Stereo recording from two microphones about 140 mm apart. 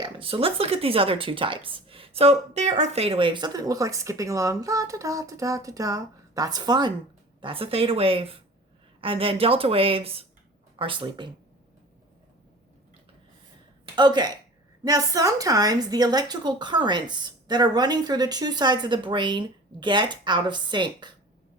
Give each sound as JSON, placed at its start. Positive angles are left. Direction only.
{"t": 0.0, "sound": "a woman's voice", "side_deg": -40}
{"t": 7.4, "sound": "a woman's voice", "side_deg": -40}
{"t": 13.8, "sound": "a woman's voice", "side_deg": -30}